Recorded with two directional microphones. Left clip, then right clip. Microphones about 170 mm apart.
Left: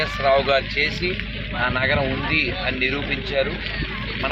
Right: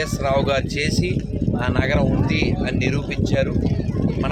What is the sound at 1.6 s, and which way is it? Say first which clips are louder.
Speech: left 3 dB; 30° right (ahead or behind).